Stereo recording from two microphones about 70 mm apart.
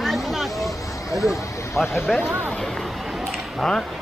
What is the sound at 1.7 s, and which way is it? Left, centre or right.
Speech, left.